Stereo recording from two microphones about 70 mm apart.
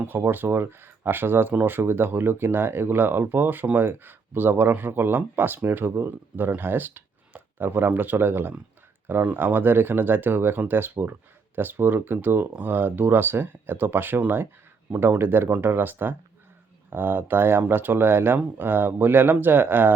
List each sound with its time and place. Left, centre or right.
0.1 s speech: right